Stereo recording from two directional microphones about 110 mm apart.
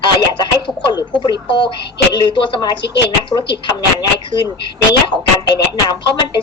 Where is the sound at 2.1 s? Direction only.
45° left (ahead or behind).